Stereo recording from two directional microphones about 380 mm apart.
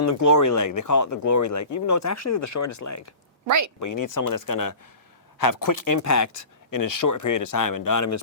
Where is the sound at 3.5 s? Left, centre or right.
Right.